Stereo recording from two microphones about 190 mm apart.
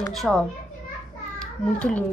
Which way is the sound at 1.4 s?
5° left (ahead or behind).